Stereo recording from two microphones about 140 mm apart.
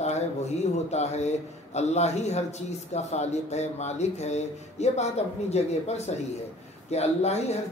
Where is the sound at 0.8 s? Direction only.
50° left (ahead or behind).